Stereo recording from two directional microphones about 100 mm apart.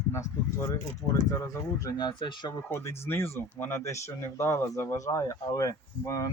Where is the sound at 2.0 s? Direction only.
50° left (ahead or behind).